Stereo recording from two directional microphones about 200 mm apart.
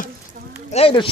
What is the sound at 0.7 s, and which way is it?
Speech, 25° left (ahead or behind).